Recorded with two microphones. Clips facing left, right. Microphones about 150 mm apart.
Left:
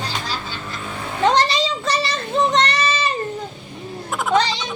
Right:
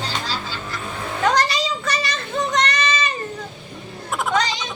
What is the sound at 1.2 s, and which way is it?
Child singing, 25° left (ahead or behind).